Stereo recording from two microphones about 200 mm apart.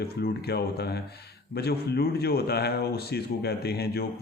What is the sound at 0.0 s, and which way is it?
Speech, 50° left (ahead or behind).